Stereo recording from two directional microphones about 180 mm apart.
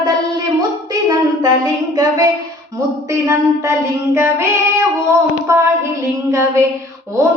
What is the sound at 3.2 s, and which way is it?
Speech, 15° right (ahead or behind).